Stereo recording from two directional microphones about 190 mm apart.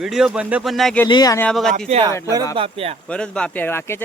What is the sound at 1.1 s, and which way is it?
Speech, 20° left (ahead or behind).